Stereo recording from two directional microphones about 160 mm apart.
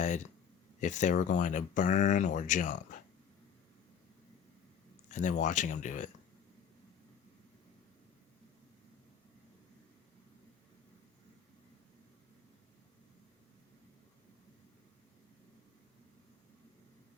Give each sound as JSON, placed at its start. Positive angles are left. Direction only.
{"t": 0.8, "sound": "speech", "side_deg": 50}
{"t": 5.1, "sound": "speech", "side_deg": 50}